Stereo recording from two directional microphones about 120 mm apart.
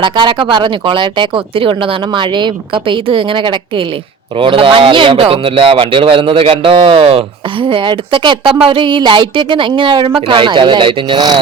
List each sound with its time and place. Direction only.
0.0 s speech: 40° right (ahead or behind)